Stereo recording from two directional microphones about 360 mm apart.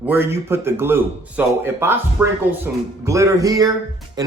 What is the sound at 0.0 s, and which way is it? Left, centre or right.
Speech, centre.